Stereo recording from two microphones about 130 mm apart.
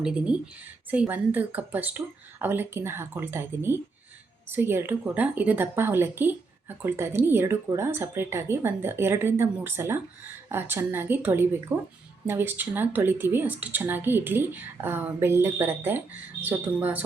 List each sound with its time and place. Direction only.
0.0 s a woman's voice: 10° right (ahead or behind)